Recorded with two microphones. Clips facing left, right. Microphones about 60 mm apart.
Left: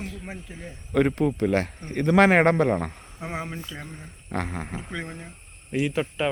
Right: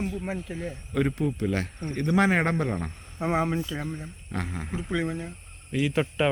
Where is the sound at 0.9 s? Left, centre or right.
Left.